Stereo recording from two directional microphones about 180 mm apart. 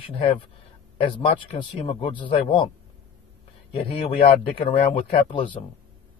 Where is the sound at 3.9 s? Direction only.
30° left (ahead or behind).